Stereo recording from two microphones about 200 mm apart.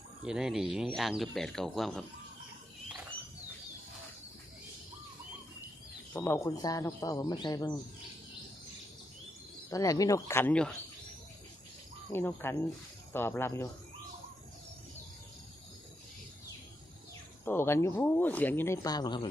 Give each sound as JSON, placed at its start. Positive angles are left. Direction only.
{"t": 0.3, "sound": "speech", "side_deg": -5}
{"t": 6.1, "sound": "speech", "side_deg": 10}
{"t": 9.6, "sound": "speech", "side_deg": 15}
{"t": 12.1, "sound": "speech", "side_deg": 10}
{"t": 17.4, "sound": "speech", "side_deg": 10}